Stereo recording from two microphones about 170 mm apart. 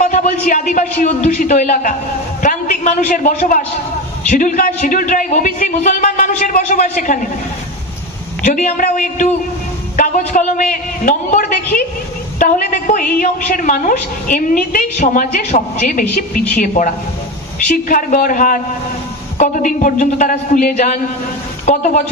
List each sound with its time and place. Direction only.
0.0 s a man's voice: 45° left (ahead or behind)
8.5 s a woman's voice: 50° left (ahead or behind)
9.9 s a sound: 50° left (ahead or behind)
12.4 s a woman's voice: 50° left (ahead or behind)